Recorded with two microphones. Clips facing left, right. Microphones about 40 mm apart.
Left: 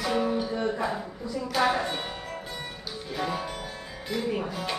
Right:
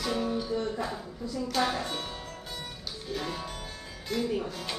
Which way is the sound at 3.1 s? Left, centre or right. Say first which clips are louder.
Left 4 dB; centre.